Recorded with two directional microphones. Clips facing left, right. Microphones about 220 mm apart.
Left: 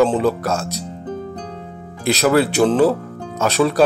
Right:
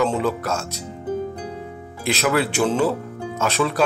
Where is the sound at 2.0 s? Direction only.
35° left (ahead or behind).